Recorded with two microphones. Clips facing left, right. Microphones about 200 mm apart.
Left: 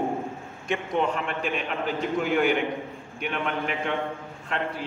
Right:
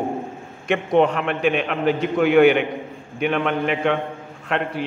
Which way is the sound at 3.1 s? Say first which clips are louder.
Right 8 dB; 90° right.